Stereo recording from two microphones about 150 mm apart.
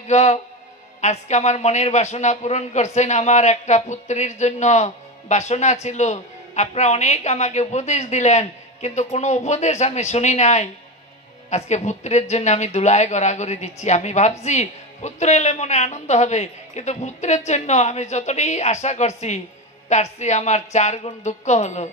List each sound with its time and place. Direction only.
0.1 s speech: 50° left (ahead or behind)